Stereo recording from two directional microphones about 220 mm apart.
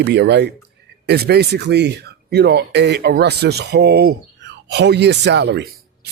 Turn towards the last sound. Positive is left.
turn(degrees=-50)  # may be behind; listen again after turning